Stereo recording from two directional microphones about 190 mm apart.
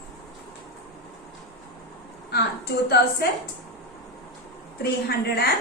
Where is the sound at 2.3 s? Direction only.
55° left (ahead or behind).